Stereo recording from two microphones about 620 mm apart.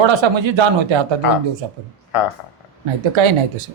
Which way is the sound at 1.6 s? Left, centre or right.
Right.